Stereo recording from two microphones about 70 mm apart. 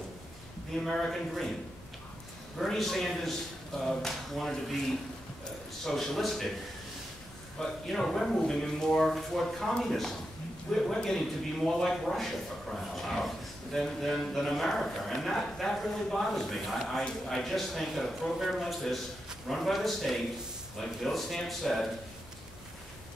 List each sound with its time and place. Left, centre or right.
0.8 s speech: centre
2.6 s speech: centre
7.5 s speech: centre